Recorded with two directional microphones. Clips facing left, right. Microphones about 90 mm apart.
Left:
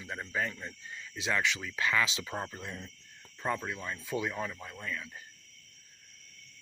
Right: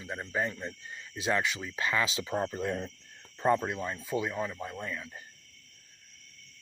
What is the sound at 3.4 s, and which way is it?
Speech, 25° right (ahead or behind).